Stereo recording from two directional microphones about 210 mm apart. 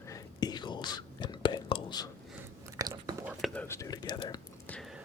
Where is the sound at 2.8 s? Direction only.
20° right (ahead or behind).